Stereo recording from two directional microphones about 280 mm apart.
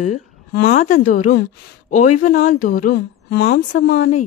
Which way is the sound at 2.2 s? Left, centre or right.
Left.